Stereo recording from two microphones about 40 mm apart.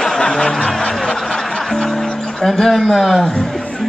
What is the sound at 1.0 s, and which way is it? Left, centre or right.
Music, centre.